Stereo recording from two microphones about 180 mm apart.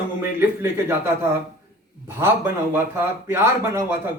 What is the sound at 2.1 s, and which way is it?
Speech, 15° right (ahead or behind).